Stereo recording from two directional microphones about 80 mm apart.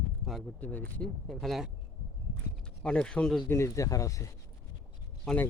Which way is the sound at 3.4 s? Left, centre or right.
Left.